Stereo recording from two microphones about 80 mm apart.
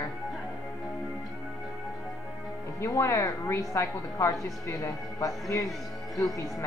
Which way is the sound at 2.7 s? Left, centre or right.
Left.